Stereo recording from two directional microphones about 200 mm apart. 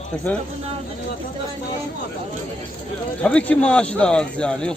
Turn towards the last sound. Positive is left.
turn(degrees=5)  # may be behind; listen again after turning